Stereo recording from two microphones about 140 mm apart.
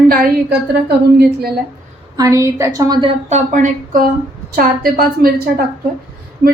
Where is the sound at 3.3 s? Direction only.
60° right (ahead or behind); by 4.1 s 75° right (ahead or behind).